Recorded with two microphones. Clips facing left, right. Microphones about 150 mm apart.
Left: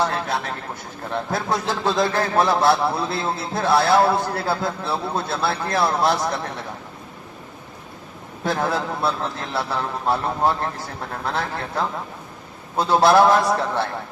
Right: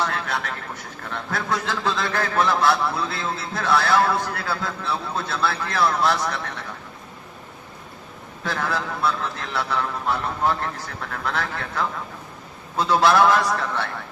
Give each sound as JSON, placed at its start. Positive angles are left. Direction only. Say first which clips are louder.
{"t": 0.0, "sound": "a sound", "louder": "left 3 dB", "side_deg": 30}
{"t": 1.1, "sound": "a man's voice", "louder": "left 3 dB", "side_deg": 30}
{"t": 8.4, "sound": "a man's voice", "louder": "left 4 dB", "side_deg": 30}